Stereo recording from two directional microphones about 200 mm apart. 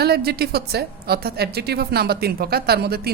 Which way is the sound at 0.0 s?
50° right (ahead or behind).